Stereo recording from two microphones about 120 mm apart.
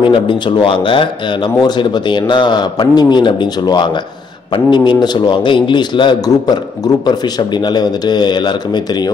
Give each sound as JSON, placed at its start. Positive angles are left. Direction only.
{"t": 0.0, "sound": "a man's voice", "side_deg": 45}